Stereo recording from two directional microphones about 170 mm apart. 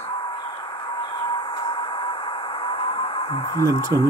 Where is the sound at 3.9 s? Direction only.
25° right (ahead or behind).